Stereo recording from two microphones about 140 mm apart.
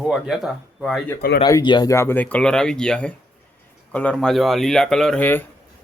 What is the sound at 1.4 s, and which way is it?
Speech, 30° left (ahead or behind).